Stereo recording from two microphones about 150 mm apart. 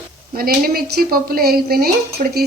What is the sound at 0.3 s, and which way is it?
A woman's voice, 85° right.